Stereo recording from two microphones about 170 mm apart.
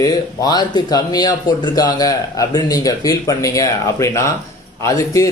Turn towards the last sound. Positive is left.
turn(degrees=20)  # may be behind; listen again after turning